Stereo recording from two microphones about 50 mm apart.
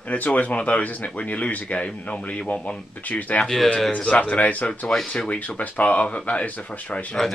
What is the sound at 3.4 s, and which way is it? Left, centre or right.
Speech, centre.